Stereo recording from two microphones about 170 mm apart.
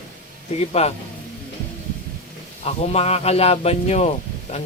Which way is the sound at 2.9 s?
35° left (ahead or behind).